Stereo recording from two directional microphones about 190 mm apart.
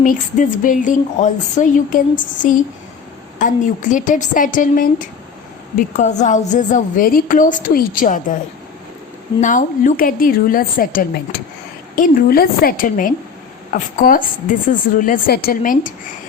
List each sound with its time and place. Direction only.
0.0 s a woman's voice: 45° left (ahead or behind)
9.4 s a woman's voice: 40° left (ahead or behind)